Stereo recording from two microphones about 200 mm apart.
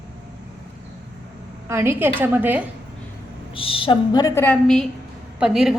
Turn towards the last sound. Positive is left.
turn(degrees=-5)  # may be behind; listen again after turning